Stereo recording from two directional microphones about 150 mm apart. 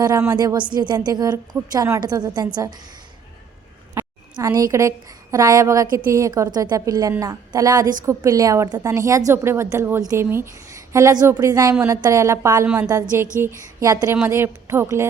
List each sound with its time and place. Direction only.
0.0 s a woman's voice: 25° right (ahead or behind)
4.4 s a woman's voice: 25° right (ahead or behind)
12.6 s a woman's voice: 10° right (ahead or behind)
12.9 s a woman's voice: 20° right (ahead or behind)